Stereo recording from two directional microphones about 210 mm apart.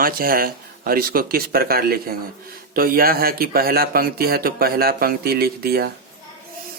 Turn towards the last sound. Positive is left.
turn(degrees=-45)  # may be behind; listen again after turning